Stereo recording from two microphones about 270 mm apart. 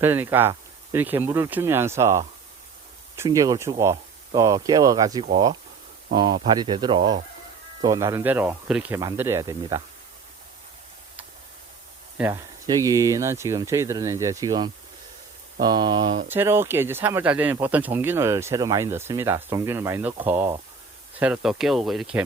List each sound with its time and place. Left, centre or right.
0.0 s speech: centre
12.1 s speech: centre